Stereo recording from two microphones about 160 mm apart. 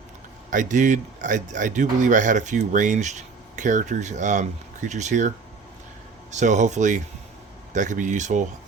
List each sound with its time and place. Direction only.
0.5 s speech: 50° right (ahead or behind)
6.3 s speech: 50° right (ahead or behind)